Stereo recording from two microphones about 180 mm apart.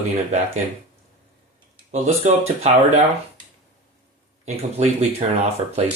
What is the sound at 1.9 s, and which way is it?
Speech, 40° right (ahead or behind).